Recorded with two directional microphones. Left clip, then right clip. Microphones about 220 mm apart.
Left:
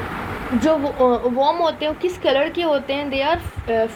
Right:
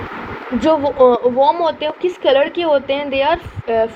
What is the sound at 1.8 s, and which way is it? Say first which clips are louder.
Speech: right 3 dB; 90° left.